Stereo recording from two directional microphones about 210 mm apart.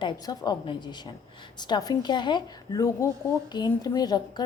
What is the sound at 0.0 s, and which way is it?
A woman's voice, 20° left (ahead or behind).